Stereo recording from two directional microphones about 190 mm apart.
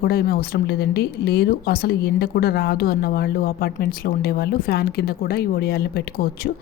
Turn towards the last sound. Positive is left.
turn(degrees=55)  # may be behind; listen again after turning